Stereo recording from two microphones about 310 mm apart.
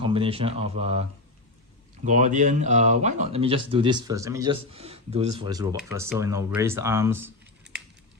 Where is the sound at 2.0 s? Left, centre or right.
Right; by 7.3 s centre.